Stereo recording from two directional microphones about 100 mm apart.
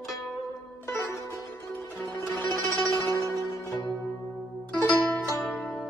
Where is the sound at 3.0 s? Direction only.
25° left (ahead or behind).